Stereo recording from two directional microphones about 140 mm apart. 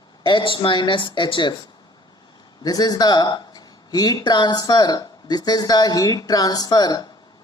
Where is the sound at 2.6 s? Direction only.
30° left (ahead or behind).